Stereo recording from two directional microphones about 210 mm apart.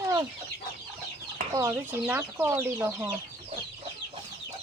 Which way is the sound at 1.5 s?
10° right (ahead or behind).